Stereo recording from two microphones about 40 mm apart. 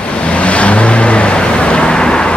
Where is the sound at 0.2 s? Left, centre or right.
Left.